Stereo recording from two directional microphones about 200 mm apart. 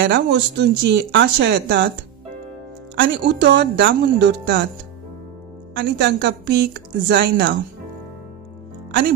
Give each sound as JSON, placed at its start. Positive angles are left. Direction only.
{"t": 0.0, "sound": "speech", "side_deg": -60}
{"t": 3.0, "sound": "speech", "side_deg": -60}
{"t": 5.8, "sound": "speech", "side_deg": -60}